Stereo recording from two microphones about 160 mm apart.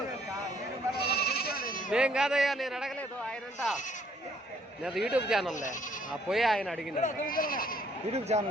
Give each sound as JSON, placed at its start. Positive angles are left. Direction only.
{"t": 0.9, "sound": "sheep", "side_deg": 80}
{"t": 1.9, "sound": "a sound", "side_deg": -5}
{"t": 4.8, "sound": "speech", "side_deg": -5}
{"t": 7.0, "sound": "speech", "side_deg": 55}
{"t": 8.1, "sound": "speech", "side_deg": -45}